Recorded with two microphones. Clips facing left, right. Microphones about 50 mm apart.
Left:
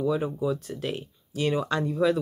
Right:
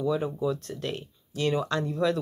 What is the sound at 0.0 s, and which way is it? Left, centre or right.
Speech, centre.